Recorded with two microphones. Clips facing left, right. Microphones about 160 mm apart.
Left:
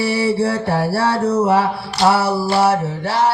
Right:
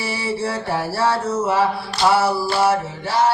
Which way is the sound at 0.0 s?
65° left (ahead or behind).